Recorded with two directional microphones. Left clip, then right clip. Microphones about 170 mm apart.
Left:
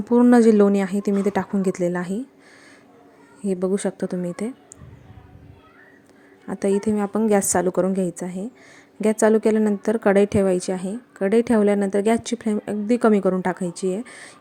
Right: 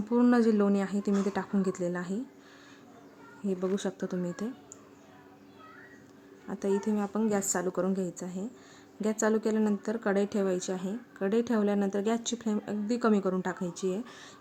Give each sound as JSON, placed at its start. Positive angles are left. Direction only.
{"t": 0.1, "sound": "a woman's voice", "side_deg": 35}
{"t": 3.4, "sound": "a woman's voice", "side_deg": 30}
{"t": 6.5, "sound": "a woman's voice", "side_deg": 40}